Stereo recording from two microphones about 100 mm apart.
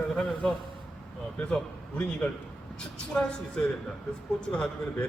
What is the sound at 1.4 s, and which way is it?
Speech, 10° left (ahead or behind).